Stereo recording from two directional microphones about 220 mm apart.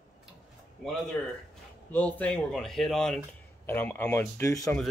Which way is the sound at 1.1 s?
10° left (ahead or behind).